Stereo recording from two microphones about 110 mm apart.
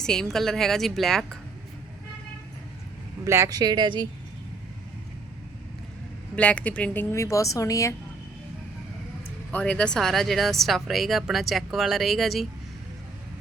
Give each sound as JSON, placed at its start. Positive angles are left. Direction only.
{"t": 0.0, "sound": "speech", "side_deg": 5}
{"t": 3.2, "sound": "speech", "side_deg": -25}
{"t": 6.3, "sound": "speech", "side_deg": 10}
{"t": 9.5, "sound": "speech", "side_deg": 10}